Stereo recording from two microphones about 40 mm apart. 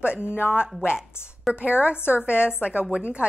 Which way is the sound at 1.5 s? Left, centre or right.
Right.